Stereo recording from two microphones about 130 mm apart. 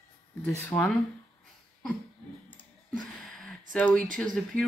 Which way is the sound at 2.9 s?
5° left (ahead or behind).